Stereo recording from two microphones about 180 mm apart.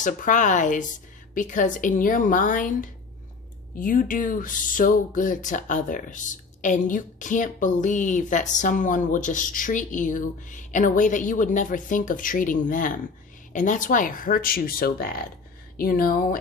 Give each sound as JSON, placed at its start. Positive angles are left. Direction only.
{"t": 0.0, "sound": "speech", "side_deg": 45}